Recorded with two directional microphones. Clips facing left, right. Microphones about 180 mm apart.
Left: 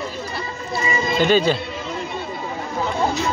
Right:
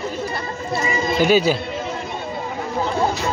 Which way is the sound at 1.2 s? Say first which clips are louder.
Right 1 dB; 10° right (ahead or behind).